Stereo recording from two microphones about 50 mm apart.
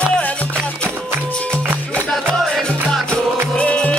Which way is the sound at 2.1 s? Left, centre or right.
Centre.